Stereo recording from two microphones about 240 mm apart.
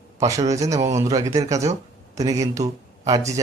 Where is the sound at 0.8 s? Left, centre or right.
Right.